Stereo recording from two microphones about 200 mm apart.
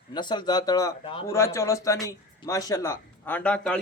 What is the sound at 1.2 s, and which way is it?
A man's voice, 15° left (ahead or behind).